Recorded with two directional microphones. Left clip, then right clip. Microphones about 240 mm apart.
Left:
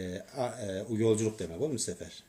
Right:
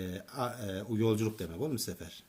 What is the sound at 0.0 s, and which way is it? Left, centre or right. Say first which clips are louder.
Speech: left 2 dB; right.